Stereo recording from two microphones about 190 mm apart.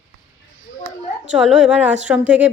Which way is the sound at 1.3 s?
5° right (ahead or behind).